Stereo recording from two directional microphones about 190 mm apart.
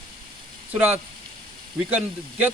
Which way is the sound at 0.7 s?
5° right (ahead or behind).